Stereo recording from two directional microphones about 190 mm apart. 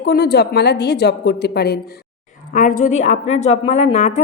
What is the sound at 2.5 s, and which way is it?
A woman's voice, 45° left (ahead or behind).